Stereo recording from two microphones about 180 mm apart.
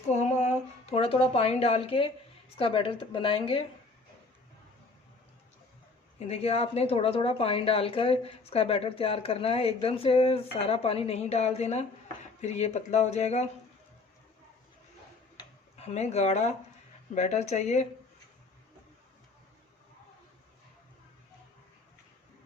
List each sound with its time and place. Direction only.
0.1 s a sound: 40° left (ahead or behind)
2.6 s a woman's voice: 30° left (ahead or behind)
6.1 s a woman's voice: 35° left (ahead or behind)
15.7 s a woman's voice: 35° left (ahead or behind)